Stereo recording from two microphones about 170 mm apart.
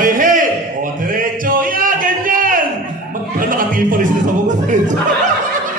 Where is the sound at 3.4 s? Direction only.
55° right (ahead or behind).